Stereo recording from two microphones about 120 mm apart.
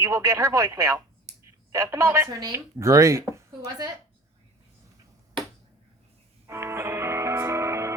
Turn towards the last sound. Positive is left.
turn(degrees=-25)  # may be behind; listen again after turning